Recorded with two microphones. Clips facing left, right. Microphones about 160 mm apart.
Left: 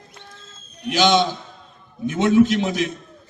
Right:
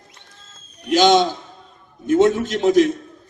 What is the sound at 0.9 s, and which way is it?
A man's voice, 45° right (ahead or behind).